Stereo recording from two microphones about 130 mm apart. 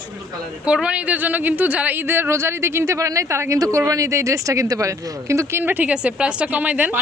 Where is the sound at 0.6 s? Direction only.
10° right (ahead or behind).